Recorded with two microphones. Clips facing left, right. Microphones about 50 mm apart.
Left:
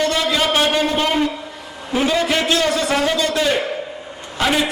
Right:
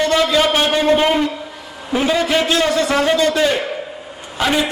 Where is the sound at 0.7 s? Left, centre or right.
Centre.